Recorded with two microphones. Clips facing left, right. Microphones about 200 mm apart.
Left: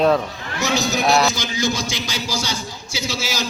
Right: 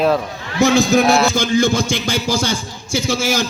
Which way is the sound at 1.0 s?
Centre (ahead or behind).